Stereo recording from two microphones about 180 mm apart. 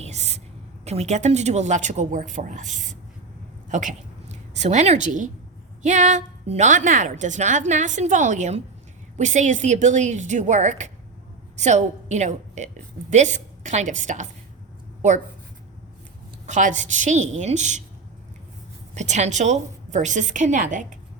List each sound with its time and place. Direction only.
0.0 s a sound: 40° right (ahead or behind)
0.9 s a woman's voice: 40° right (ahead or behind)
16.5 s a woman's voice: 45° right (ahead or behind)
18.9 s a woman's voice: 40° right (ahead or behind)